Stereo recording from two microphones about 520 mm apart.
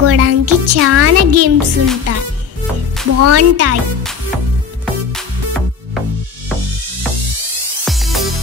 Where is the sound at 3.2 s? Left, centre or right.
Right.